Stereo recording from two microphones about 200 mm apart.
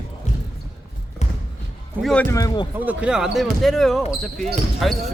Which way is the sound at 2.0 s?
5° left (ahead or behind).